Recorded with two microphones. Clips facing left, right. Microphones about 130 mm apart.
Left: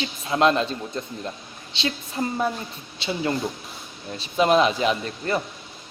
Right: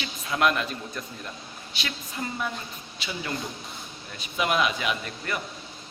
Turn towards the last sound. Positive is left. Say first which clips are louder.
# left 6 dB
turn(degrees=30)  # may be behind; listen again after turning